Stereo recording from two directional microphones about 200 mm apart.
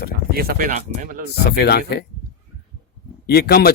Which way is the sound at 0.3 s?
45° right (ahead or behind).